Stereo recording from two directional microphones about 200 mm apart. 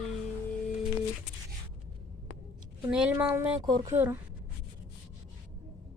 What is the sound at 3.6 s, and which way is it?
Speech, 20° right (ahead or behind).